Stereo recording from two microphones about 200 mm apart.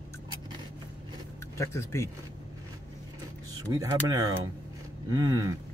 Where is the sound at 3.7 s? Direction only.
20° right (ahead or behind).